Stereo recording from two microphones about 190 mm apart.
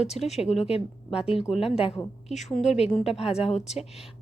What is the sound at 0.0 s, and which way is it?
Speech, 35° left (ahead or behind).